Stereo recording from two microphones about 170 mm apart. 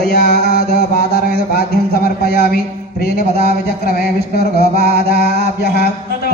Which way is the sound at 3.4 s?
65° left (ahead or behind).